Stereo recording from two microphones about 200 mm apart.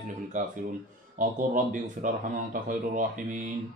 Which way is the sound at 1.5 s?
45° right (ahead or behind).